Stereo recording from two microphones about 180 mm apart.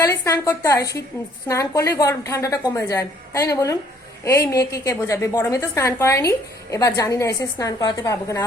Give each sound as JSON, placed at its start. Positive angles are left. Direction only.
{"t": 0.0, "sound": "a woman's voice", "side_deg": 15}